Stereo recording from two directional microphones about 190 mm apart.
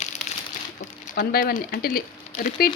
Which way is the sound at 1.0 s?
45° left (ahead or behind).